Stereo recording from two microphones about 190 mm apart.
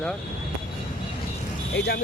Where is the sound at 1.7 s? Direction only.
60° left (ahead or behind).